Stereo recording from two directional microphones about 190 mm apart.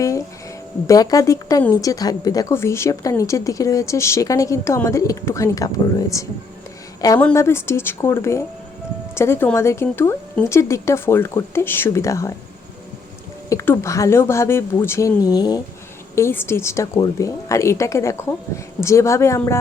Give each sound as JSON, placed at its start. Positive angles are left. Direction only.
{"t": 0.9, "sound": "a woman's voice", "side_deg": 20}
{"t": 13.5, "sound": "a woman's voice", "side_deg": 15}